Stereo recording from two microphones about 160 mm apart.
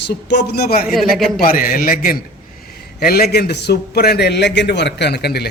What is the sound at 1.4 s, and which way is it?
A man's voice, 65° left (ahead or behind).